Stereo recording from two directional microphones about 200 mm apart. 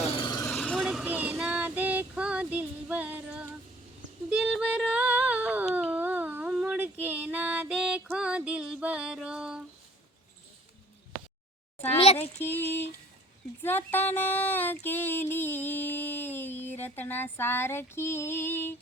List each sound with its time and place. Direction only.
0.0 s vehicle: 25° left (ahead or behind)
0.4 s child singing: 5° left (ahead or behind)
4.3 s a sound: 5° right (ahead or behind)
7.0 s female singing: 10° right (ahead or behind)
11.9 s a child's voice: 30° left (ahead or behind)
12.5 s speech: 10° left (ahead or behind)
14.8 s a sound: 10° left (ahead or behind)